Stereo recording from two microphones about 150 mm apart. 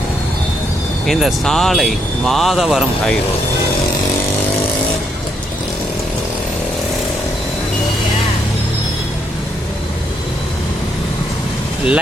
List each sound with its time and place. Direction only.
1.0 s speech: centre (ahead or behind)